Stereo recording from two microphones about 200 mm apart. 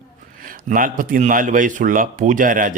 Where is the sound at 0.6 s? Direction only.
40° right (ahead or behind).